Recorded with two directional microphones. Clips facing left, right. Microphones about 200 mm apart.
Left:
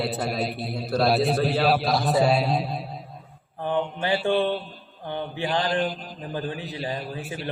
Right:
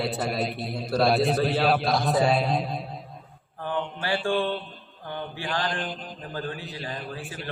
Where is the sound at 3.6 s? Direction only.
20° left (ahead or behind).